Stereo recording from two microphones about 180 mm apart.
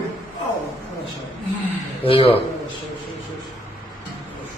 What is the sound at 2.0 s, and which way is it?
Speech, 30° left (ahead or behind).